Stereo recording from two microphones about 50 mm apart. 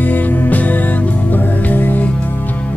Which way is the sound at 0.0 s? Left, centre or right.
Left.